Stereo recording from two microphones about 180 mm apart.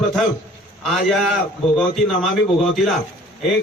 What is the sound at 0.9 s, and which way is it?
Speech, centre (ahead or behind).